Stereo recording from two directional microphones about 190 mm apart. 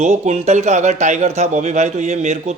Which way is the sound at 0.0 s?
40° right (ahead or behind).